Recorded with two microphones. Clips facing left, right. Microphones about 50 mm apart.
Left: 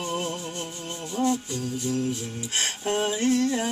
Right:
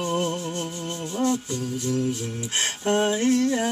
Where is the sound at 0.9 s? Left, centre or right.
Right.